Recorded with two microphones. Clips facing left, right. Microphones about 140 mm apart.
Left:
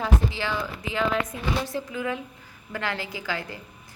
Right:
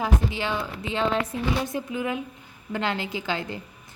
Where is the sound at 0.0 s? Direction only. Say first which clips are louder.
Right 1 dB; 20° right (ahead or behind).